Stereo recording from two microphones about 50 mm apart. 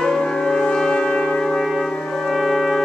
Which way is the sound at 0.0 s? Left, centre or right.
Centre.